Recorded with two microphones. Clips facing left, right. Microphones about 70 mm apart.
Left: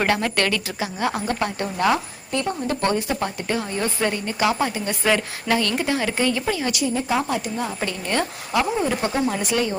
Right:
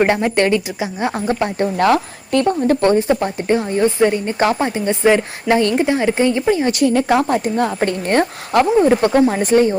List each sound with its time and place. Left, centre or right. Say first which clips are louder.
0.0 s speech: right 6 dB; right
1.8 s a woman's voice: right 5 dB; right
2.6 s speech: right 8 dB; right
6.8 s a woman's voice: right 8 dB; right
7.3 s speech: right 8 dB; right
9.3 s speech: right 9 dB; right